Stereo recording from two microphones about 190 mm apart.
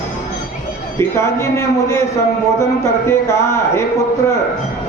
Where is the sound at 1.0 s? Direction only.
15° left (ahead or behind).